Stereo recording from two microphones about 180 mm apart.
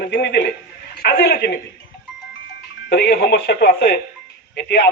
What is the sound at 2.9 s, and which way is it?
A man's voice, 65° left (ahead or behind).